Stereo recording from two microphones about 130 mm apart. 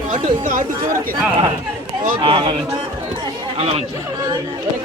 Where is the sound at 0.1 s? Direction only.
75° right (ahead or behind).